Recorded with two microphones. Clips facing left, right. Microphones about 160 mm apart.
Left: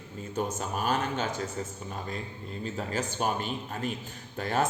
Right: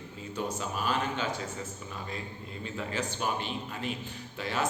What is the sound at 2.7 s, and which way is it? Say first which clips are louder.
A man's voice: left 1 dB; 45° left (ahead or behind).